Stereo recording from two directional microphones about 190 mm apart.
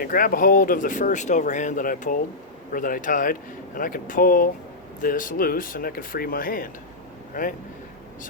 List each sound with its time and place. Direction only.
0.0 s speech: 50° left (ahead or behind)